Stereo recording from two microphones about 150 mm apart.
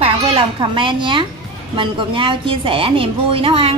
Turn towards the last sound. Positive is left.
turn(degrees=-35)  # may be behind; listen again after turning